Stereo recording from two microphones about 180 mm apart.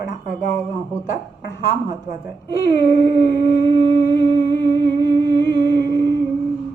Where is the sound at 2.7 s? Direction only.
20° right (ahead or behind).